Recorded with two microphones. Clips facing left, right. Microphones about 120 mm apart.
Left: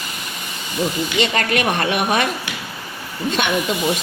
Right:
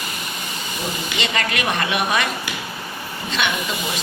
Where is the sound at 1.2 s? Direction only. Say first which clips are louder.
Left 5 dB; 45° left (ahead or behind).